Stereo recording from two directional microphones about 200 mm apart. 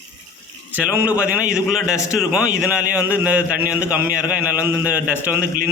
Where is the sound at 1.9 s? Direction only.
15° left (ahead or behind).